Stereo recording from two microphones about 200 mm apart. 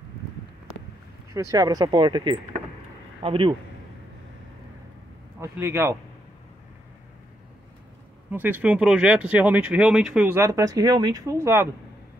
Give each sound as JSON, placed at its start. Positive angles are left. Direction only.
{"t": 1.3, "sound": "speech", "side_deg": -15}
{"t": 5.4, "sound": "speech", "side_deg": -10}
{"t": 8.3, "sound": "speech", "side_deg": -10}